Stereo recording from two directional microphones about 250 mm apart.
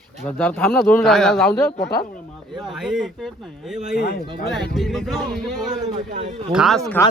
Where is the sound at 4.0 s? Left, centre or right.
Left.